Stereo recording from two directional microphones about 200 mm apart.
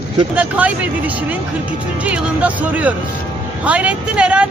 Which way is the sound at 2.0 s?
5° right (ahead or behind).